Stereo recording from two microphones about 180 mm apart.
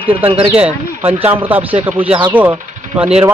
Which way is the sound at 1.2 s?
10° right (ahead or behind).